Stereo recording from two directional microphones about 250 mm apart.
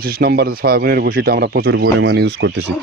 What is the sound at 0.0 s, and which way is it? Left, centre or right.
Speech, right.